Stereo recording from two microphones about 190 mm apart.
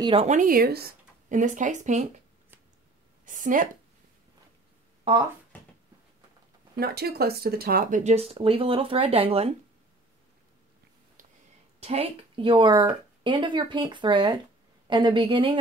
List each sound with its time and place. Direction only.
0.0 s speech: 30° right (ahead or behind)
3.3 s a woman's voice: 45° right (ahead or behind)
5.1 s speech: 30° right (ahead or behind)
5.5 s a sound: 10° left (ahead or behind)
6.8 s speech: 55° right (ahead or behind); by 9.5 s 30° right (ahead or behind)
11.8 s speech: 30° right (ahead or behind)